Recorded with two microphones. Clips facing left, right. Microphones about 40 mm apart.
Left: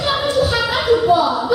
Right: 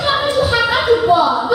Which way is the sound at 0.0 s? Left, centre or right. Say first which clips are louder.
Right 2 dB; centre.